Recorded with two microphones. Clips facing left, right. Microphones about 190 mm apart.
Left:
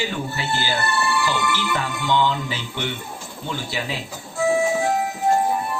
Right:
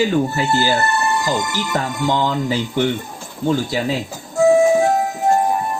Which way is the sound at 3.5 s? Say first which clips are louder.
Right 10 dB; 45° right (ahead or behind).